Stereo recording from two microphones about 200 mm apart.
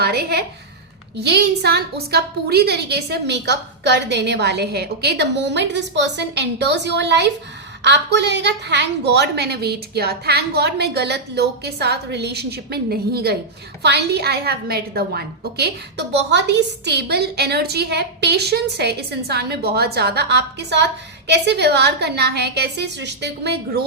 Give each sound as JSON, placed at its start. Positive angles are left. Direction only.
{"t": 0.0, "sound": "a woman's voice", "side_deg": -55}